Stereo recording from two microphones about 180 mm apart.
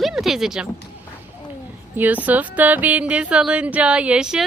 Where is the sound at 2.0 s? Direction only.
10° right (ahead or behind).